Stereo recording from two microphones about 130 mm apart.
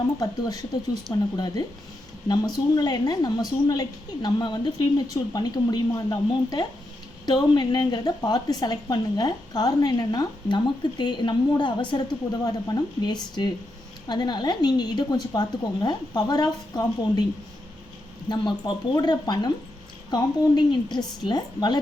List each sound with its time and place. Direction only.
0.2 s a woman's voice: 30° left (ahead or behind)
18.3 s a woman's voice: 35° left (ahead or behind)